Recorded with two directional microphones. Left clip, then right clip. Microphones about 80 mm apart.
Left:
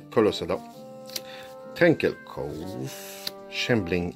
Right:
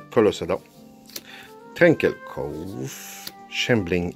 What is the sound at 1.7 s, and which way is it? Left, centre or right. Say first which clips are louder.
Speech: right 4 dB; centre.